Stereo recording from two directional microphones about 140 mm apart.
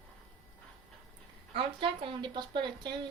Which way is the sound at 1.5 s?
40° right (ahead or behind).